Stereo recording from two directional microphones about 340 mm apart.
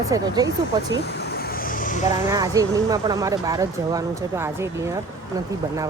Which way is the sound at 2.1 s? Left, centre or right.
Centre.